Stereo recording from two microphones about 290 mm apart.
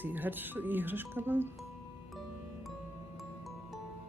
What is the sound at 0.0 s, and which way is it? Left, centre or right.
Speech, centre.